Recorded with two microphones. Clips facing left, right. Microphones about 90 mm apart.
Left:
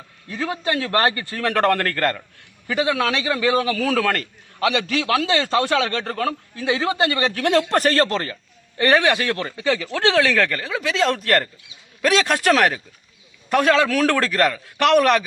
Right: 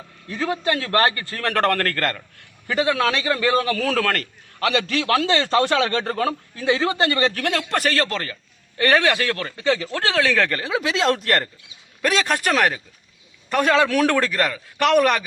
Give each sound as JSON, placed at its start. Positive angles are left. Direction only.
{"t": 0.3, "sound": "speech", "side_deg": 10}
{"t": 1.4, "sound": "a man's voice", "side_deg": 10}
{"t": 6.7, "sound": "speech", "side_deg": 10}
{"t": 7.7, "sound": "a man's voice", "side_deg": 35}
{"t": 10.2, "sound": "a man's voice", "side_deg": 0}
{"t": 10.7, "sound": "speech", "side_deg": -25}
{"t": 12.2, "sound": "a man's voice", "side_deg": 0}